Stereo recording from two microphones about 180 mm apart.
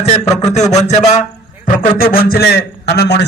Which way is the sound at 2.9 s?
65° left (ahead or behind).